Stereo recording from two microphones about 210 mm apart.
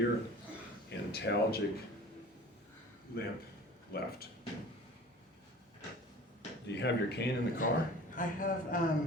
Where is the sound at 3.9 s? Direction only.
45° left (ahead or behind).